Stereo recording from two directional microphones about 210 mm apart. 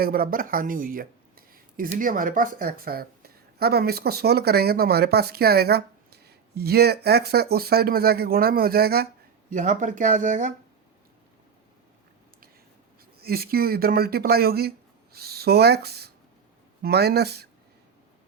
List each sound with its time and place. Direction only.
0.0 s speech: 45° right (ahead or behind)
9.5 s speech: 35° right (ahead or behind)
13.1 s speech: 45° right (ahead or behind)